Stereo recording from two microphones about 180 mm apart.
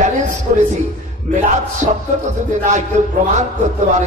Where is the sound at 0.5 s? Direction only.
50° right (ahead or behind).